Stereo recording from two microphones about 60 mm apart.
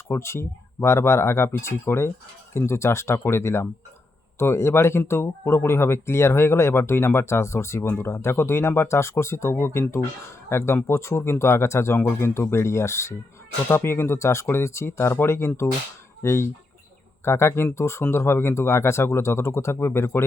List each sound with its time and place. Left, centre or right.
0.2 s speech: left
11.9 s speech: left